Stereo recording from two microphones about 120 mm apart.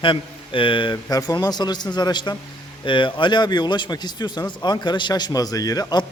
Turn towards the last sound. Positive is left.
turn(degrees=30)  # may be behind; listen again after turning